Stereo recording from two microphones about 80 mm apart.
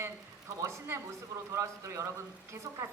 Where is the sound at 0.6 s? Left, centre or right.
Right.